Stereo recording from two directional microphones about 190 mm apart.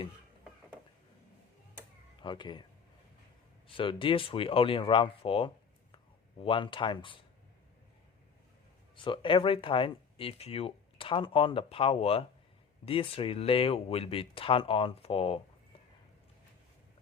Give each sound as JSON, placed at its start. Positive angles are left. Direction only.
{"t": 2.2, "sound": "speech", "side_deg": 25}
{"t": 3.7, "sound": "speech", "side_deg": 25}
{"t": 9.0, "sound": "speech", "side_deg": 25}